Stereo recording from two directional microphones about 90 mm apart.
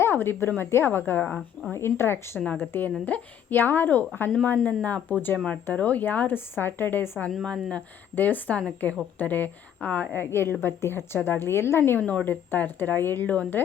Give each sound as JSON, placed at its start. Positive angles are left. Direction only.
{"t": 0.0, "sound": "a woman's voice", "side_deg": 25}
{"t": 7.3, "sound": "a woman's voice", "side_deg": 5}
{"t": 8.1, "sound": "a woman's voice", "side_deg": 20}